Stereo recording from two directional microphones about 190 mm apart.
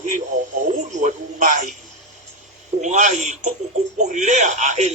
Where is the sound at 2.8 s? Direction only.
40° right (ahead or behind).